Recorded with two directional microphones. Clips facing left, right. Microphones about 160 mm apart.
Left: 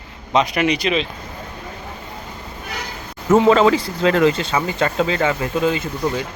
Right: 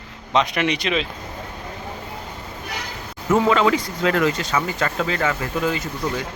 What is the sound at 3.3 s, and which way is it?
Speech, 35° left (ahead or behind).